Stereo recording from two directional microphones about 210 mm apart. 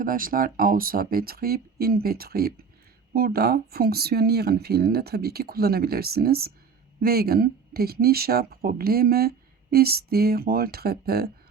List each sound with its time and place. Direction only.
0.0 s speech: 40° right (ahead or behind)